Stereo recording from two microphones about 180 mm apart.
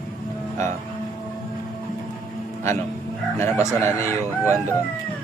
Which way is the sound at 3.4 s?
15° left (ahead or behind).